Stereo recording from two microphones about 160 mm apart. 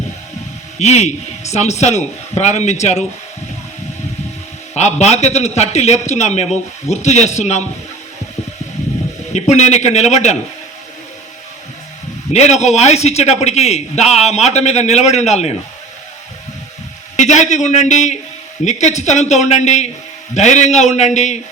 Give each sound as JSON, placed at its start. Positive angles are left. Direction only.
{"t": 0.8, "sound": "a man's voice", "side_deg": 45}
{"t": 4.7, "sound": "a man's voice", "side_deg": 45}
{"t": 9.3, "sound": "a man's voice", "side_deg": 45}
{"t": 12.3, "sound": "a man's voice", "side_deg": 45}
{"t": 17.2, "sound": "a man's voice", "side_deg": 50}